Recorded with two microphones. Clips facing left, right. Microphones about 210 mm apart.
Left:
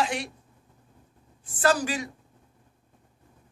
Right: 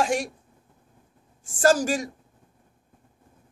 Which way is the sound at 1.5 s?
45° right (ahead or behind).